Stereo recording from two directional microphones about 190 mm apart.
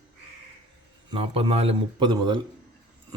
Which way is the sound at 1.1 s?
30° right (ahead or behind).